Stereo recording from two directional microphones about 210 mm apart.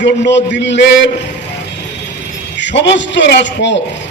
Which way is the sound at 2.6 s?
60° left (ahead or behind).